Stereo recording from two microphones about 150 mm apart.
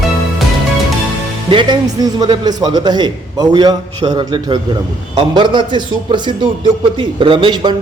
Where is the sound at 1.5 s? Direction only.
30° right (ahead or behind).